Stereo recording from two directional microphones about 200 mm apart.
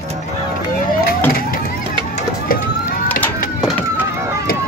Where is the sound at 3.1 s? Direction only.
5° left (ahead or behind).